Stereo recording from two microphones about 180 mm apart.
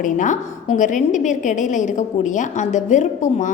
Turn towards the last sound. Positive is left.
turn(degrees=45)  # may be behind; listen again after turning